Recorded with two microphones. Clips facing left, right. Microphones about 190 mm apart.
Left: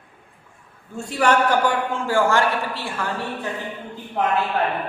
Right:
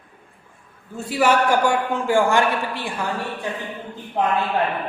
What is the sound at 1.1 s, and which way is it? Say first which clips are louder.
A man's voice: right 1 dB; 5° right (ahead or behind).